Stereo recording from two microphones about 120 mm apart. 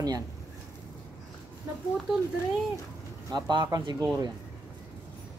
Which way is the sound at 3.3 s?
40° right (ahead or behind).